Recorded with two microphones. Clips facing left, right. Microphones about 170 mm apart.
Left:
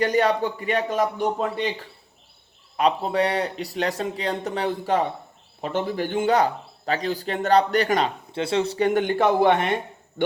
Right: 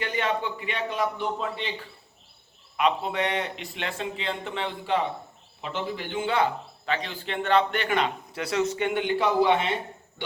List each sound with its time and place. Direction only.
0.0 s a man's voice: 40° left (ahead or behind)